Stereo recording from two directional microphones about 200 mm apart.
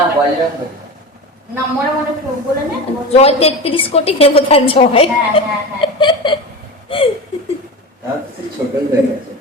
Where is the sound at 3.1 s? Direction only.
30° left (ahead or behind).